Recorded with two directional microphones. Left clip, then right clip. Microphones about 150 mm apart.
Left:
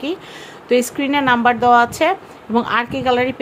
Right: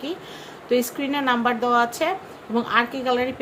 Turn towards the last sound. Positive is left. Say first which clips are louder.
# left 5 dB
turn(degrees=45)  # may be behind; listen again after turning